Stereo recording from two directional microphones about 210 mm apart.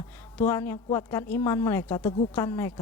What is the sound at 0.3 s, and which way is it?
Speech, 10° left (ahead or behind).